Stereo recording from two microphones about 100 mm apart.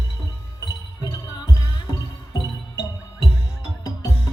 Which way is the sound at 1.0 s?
40° left (ahead or behind).